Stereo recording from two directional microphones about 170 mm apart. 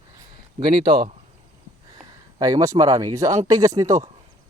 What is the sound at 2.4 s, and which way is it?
Speech, 20° right (ahead or behind).